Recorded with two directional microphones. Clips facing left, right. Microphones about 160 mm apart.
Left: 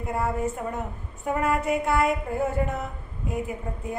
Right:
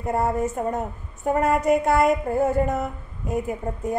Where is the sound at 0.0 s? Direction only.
40° right (ahead or behind).